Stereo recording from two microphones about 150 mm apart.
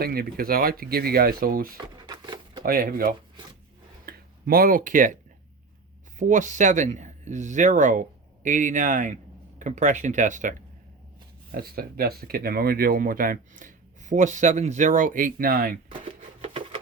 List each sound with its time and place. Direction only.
0.0 s speech: 85° right
2.0 s a sound: 30° right (ahead or behind)
2.6 s speech: 85° right
4.0 s a sound: 75° right (ahead or behind)
6.1 s speech: 55° right (ahead or behind)
11.5 s speech: 90° right; by 15.7 s 75° right (ahead or behind)
16.4 s patter: 40° right (ahead or behind)